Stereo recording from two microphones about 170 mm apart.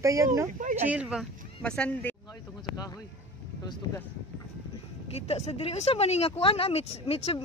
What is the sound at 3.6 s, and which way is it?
Speech, 25° left (ahead or behind).